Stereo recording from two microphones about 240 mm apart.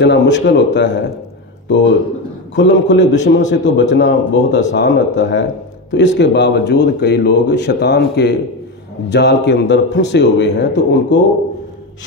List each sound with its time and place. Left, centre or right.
0.0 s speech: left
2.5 s speech: left